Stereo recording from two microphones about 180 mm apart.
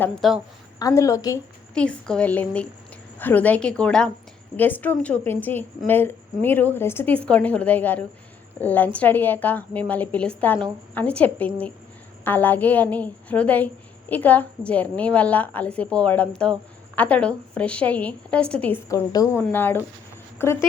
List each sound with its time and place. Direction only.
0.2 s a woman's voice: centre (ahead or behind)
0.8 s a woman's voice: 20° left (ahead or behind)
1.7 s a woman's voice: 5° left (ahead or behind)